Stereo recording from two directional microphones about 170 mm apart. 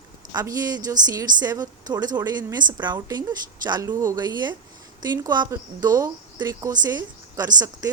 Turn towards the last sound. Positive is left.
turn(degrees=-20)  # may be behind; listen again after turning